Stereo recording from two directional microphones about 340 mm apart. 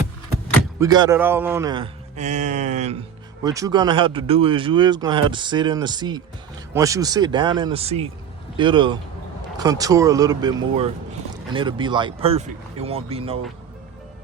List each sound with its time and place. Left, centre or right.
0.8 s speech: centre
3.4 s speech: centre